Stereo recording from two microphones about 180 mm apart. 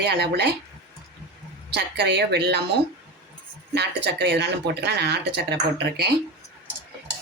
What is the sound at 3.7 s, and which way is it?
Speech, 70° right (ahead or behind).